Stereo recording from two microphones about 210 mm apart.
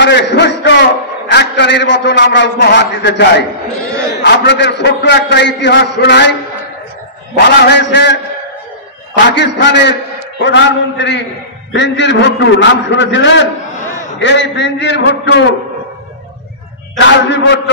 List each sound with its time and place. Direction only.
0.0 s a man's voice: 55° left (ahead or behind)
7.3 s a man's voice: 55° left (ahead or behind)
17.0 s a man's voice: 60° left (ahead or behind)